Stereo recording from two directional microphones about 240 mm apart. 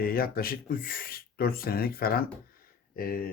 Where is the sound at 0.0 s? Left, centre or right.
Left.